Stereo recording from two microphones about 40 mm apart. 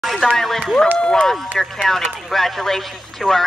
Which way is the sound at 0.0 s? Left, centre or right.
Centre.